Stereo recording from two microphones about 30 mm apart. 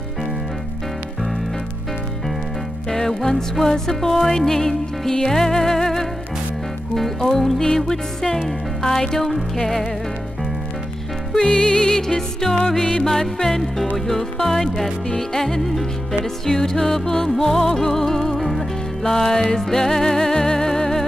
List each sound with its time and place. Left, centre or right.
2.9 s music: centre
11.3 s music: left; by 18.7 s centre
19.0 s music: centre